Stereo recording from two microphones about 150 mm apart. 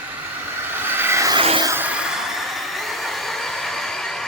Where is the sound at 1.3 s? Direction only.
35° right (ahead or behind).